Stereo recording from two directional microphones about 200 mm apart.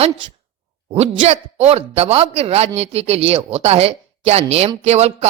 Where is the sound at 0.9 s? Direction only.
30° right (ahead or behind).